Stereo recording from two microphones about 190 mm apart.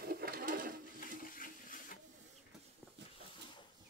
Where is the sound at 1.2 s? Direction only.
45° left (ahead or behind).